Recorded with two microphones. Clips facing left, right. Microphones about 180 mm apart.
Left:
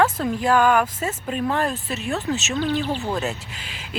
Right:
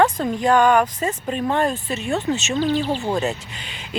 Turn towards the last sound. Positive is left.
turn(degrees=0)  # may be behind; listen again after turning